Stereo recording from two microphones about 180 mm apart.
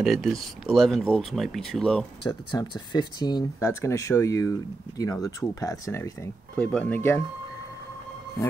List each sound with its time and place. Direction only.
0.0 s speech: centre (ahead or behind)
2.2 s speech: 25° left (ahead or behind)